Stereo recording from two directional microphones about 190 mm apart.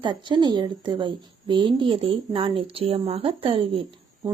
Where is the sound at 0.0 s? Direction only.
25° right (ahead or behind).